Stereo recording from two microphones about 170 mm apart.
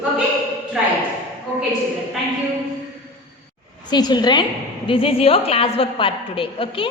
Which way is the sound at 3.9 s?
25° left (ahead or behind).